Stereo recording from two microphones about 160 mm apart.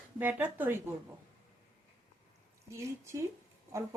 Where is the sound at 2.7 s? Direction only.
20° right (ahead or behind).